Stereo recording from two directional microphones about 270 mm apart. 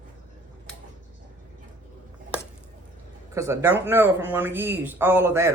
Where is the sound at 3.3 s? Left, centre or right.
Centre.